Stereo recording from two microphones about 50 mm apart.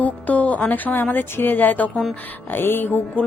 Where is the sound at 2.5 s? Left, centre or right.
Left.